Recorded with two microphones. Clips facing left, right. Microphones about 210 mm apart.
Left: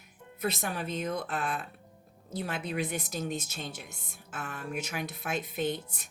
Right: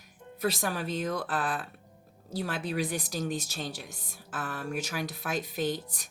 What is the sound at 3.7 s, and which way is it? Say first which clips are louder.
Speech: right 3 dB; 90° right.